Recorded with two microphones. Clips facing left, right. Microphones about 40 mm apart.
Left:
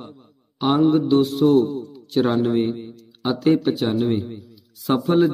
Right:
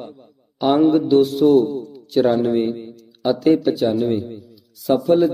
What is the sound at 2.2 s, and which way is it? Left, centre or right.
A man's voice, centre.